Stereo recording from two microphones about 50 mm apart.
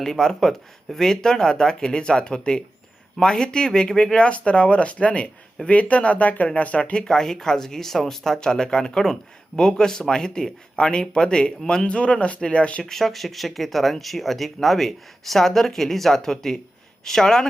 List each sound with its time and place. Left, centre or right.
0.0 s speech: centre
11.9 s speech: left
12.8 s speech: centre